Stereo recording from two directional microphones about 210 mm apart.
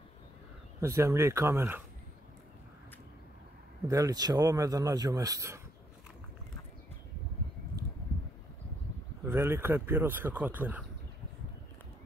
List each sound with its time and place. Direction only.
0.7 s speech: 15° right (ahead or behind)
3.8 s speech: 15° right (ahead or behind)
9.2 s speech: 10° right (ahead or behind)